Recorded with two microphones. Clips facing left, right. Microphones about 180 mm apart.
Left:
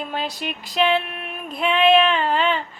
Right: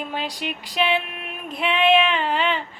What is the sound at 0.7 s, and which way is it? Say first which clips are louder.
Child singing: left 3 dB; 40° left (ahead or behind).